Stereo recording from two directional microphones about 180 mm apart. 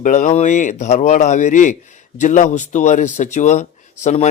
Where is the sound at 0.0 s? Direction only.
45° left (ahead or behind).